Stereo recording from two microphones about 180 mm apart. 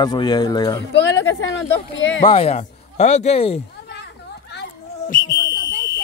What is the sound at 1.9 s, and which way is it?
Speech, 90° left.